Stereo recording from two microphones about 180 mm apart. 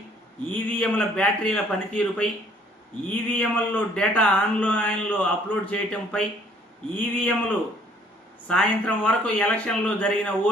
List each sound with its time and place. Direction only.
0.4 s a man's voice: 5° left (ahead or behind)
3.3 s a man's voice: 10° left (ahead or behind)